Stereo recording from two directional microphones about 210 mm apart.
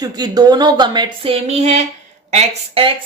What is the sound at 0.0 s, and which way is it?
Speech, 20° right (ahead or behind).